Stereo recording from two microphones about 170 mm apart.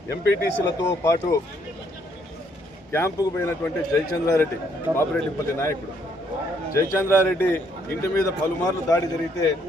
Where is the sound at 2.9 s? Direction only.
15° left (ahead or behind).